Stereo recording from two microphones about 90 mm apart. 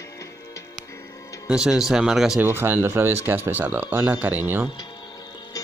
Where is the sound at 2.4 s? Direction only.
25° right (ahead or behind).